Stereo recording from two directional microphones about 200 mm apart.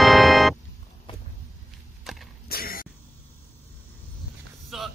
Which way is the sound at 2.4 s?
50° left (ahead or behind).